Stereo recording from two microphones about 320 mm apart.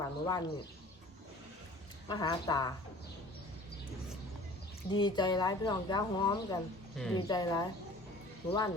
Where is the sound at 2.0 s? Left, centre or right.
Centre.